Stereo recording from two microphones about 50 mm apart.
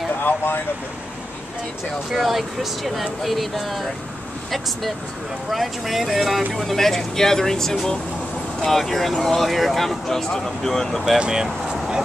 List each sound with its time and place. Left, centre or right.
0.2 s speech: left
2.1 s speech: centre
5.5 s speech: centre
11.1 s speech: centre